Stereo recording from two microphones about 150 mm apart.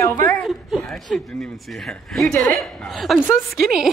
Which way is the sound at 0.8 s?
5° left (ahead or behind).